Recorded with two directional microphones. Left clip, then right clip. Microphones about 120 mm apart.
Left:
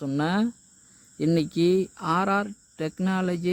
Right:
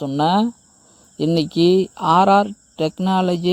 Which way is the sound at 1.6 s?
25° left (ahead or behind).